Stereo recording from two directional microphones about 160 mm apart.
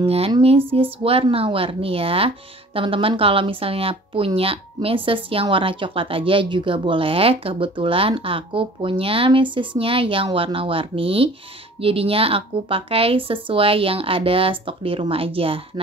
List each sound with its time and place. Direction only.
0.0 s speech: 40° right (ahead or behind)